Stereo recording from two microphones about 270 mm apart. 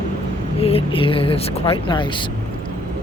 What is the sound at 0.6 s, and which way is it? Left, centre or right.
Speech, left.